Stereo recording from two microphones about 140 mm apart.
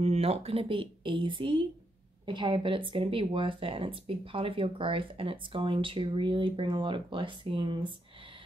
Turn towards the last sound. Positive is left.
turn(degrees=-35)  # may be behind; listen again after turning